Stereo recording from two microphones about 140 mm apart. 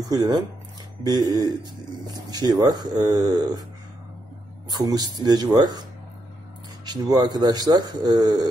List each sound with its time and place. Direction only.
0.1 s speech: 30° right (ahead or behind)
4.6 s speech: 30° right (ahead or behind)
6.9 s speech: 30° right (ahead or behind)